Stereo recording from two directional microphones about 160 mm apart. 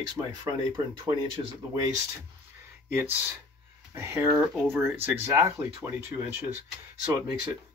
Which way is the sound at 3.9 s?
15° right (ahead or behind).